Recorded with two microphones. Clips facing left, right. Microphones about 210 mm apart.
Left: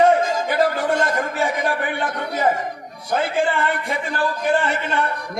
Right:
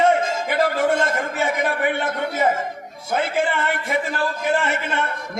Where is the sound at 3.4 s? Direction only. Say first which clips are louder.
Left 2 dB; 25° right (ahead or behind).